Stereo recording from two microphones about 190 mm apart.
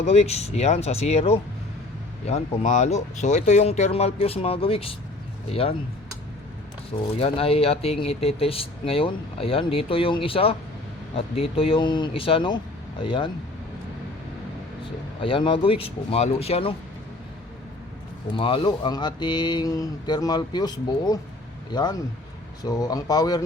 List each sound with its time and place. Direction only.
0.0 s speech: 35° left (ahead or behind)
7.2 s speech: 30° left (ahead or behind)
15.2 s speech: 25° left (ahead or behind)
18.3 s speech: 25° left (ahead or behind)